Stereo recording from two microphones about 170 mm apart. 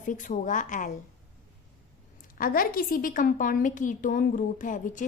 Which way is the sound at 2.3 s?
55° left (ahead or behind).